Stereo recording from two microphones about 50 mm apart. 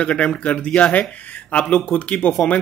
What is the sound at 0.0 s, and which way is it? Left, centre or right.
A man's voice, left.